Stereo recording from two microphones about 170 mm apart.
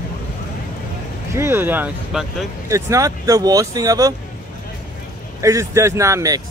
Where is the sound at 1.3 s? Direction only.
15° right (ahead or behind).